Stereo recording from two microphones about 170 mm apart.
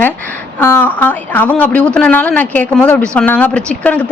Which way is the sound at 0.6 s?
10° left (ahead or behind).